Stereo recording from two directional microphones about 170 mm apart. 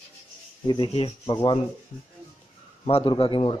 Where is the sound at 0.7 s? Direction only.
30° left (ahead or behind).